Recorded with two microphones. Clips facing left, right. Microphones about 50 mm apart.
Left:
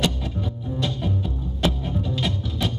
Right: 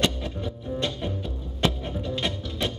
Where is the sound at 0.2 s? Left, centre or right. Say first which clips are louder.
Left 2 dB; centre.